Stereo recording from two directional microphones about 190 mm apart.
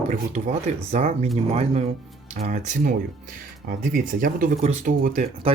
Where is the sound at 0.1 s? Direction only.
35° right (ahead or behind).